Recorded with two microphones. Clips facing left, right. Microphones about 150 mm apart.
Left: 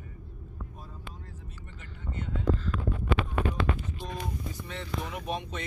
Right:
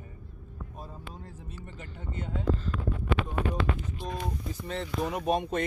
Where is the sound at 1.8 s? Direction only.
30° right (ahead or behind).